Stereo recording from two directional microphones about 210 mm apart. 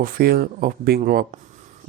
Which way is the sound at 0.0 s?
45° right (ahead or behind).